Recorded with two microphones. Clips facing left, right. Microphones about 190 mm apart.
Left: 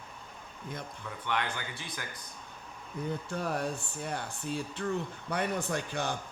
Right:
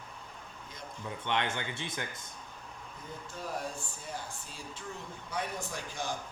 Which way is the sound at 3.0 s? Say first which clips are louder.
Left 9 dB; 65° left (ahead or behind).